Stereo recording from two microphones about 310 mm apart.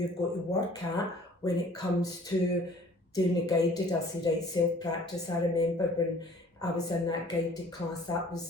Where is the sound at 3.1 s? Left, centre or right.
Centre.